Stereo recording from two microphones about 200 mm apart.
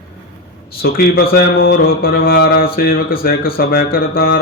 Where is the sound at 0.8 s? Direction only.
50° left (ahead or behind).